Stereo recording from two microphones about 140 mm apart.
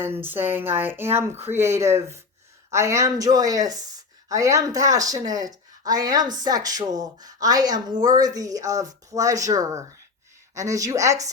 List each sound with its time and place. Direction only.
0.0 s a woman's voice: 15° right (ahead or behind)